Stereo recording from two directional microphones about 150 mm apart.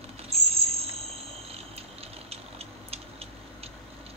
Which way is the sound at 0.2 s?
40° right (ahead or behind).